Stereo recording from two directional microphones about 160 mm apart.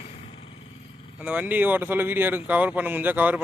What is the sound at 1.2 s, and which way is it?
Speech, 10° right (ahead or behind).